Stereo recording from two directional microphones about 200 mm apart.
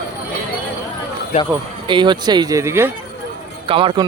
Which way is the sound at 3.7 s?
25° right (ahead or behind).